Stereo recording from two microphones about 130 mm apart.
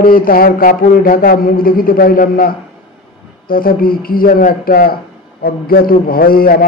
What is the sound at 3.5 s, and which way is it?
Speech, 90° left.